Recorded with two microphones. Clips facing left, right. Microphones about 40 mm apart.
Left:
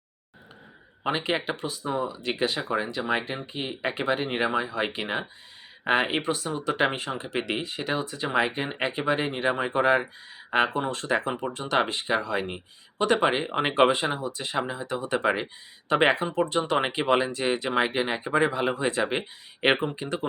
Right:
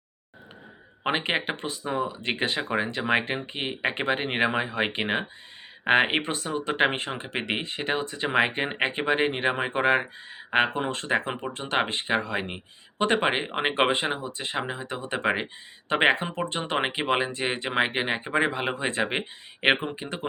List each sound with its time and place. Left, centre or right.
1.0 s speech: right
13.5 s speech: right
19.6 s speech: centre